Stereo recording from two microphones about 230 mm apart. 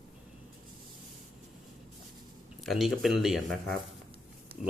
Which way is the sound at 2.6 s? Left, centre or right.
Centre.